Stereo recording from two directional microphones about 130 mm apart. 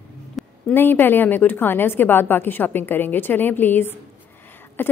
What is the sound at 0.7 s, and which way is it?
A woman's voice, 15° left (ahead or behind).